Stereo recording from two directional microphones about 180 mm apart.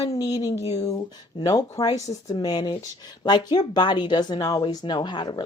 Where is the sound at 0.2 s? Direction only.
20° left (ahead or behind).